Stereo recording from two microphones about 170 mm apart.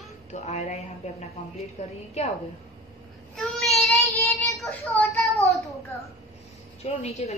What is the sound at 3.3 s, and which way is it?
Child singing, centre (ahead or behind).